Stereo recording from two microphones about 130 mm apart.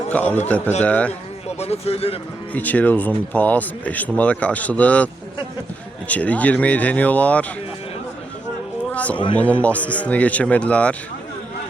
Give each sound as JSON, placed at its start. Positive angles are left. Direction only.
{"t": 0.1, "sound": "speech", "side_deg": 10}
{"t": 1.5, "sound": "speech", "side_deg": 55}
{"t": 2.5, "sound": "speech", "side_deg": 10}
{"t": 6.1, "sound": "speech", "side_deg": 10}
{"t": 8.9, "sound": "a sound", "side_deg": 10}
{"t": 9.4, "sound": "speech", "side_deg": 10}